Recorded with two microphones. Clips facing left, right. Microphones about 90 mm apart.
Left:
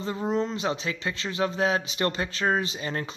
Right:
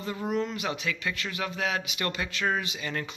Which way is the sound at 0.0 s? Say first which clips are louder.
Left 3 dB; 25° left (ahead or behind).